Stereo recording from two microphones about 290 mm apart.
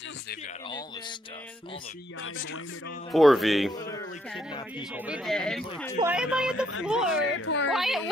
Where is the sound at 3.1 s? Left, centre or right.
Centre.